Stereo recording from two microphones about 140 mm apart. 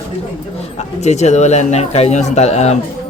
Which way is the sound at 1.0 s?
55° left (ahead or behind).